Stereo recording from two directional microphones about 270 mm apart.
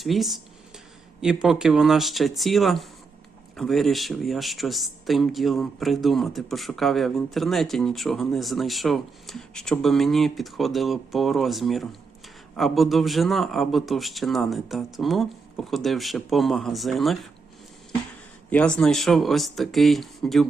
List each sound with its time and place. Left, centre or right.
0.0 s speech: centre
18.5 s speech: centre